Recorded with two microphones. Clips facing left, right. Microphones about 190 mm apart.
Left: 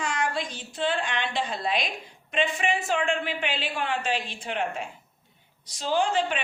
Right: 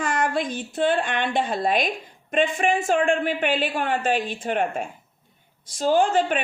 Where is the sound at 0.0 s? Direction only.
55° right (ahead or behind).